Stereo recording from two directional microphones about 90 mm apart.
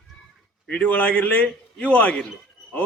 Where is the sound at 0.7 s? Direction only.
15° left (ahead or behind).